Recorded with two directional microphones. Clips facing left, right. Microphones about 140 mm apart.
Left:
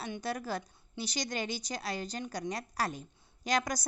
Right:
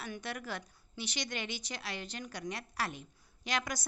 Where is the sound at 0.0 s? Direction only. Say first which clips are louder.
Left 5 dB; 35° left (ahead or behind).